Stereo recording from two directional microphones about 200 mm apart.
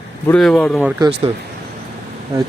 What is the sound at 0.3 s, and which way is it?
Speech, centre (ahead or behind).